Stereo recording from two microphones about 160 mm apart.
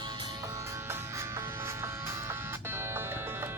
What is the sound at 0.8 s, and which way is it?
Music, 15° right (ahead or behind).